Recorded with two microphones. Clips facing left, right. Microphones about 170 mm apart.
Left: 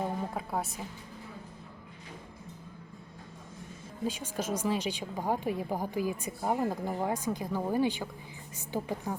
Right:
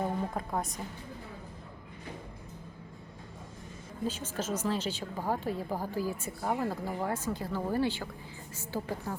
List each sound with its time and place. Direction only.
0.3 s a woman's voice: 5° left (ahead or behind)
4.0 s a woman's voice: 10° left (ahead or behind)